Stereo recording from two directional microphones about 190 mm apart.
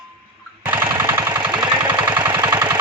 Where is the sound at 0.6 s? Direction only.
10° right (ahead or behind).